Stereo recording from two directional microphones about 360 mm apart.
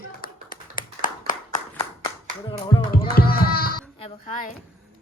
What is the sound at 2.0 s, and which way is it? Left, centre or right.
Clapping, centre.